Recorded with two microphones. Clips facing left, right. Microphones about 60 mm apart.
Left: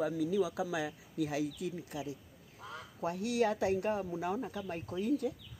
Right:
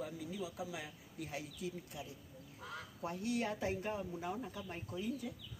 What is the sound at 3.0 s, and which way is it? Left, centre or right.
Speech, left.